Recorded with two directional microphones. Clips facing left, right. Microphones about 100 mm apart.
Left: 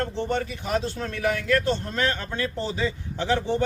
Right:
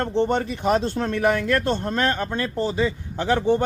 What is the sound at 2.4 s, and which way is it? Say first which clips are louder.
Speech: right 3 dB; 45° right (ahead or behind).